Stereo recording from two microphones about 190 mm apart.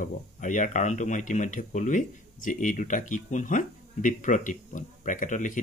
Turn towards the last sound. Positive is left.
turn(degrees=40)  # may be behind; listen again after turning